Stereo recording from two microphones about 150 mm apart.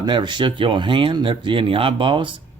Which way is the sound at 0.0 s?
30° right (ahead or behind).